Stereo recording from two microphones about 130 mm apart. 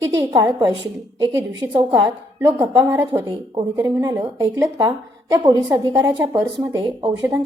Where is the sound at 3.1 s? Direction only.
20° right (ahead or behind).